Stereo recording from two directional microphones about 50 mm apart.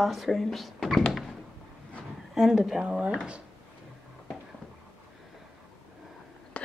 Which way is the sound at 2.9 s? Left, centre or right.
Centre.